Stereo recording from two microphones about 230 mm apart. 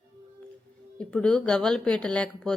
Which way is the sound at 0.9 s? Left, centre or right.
Centre.